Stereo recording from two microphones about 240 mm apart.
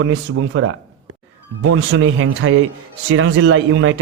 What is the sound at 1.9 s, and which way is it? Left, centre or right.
A man's voice, right.